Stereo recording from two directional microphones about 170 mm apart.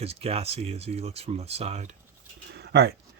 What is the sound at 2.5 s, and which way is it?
Dog, 75° right (ahead or behind).